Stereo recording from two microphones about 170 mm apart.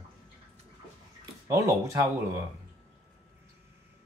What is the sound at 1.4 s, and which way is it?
Speech, 15° right (ahead or behind).